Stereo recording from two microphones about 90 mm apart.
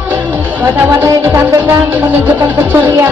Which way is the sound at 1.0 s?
30° right (ahead or behind).